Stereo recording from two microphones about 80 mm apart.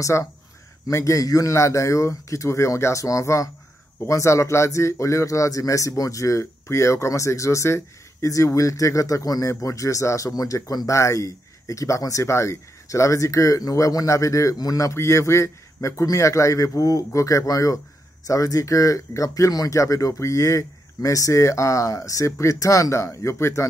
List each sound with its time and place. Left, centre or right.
0.0 s speech: left